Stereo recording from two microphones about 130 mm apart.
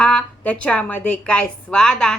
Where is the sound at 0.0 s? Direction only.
10° left (ahead or behind).